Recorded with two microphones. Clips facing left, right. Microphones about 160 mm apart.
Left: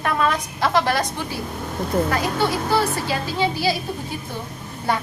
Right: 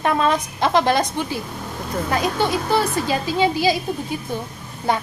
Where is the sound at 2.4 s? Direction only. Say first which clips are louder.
Even; 20° right (ahead or behind).